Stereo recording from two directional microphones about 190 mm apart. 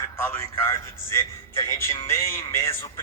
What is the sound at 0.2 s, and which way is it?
A man's voice, 15° left (ahead or behind).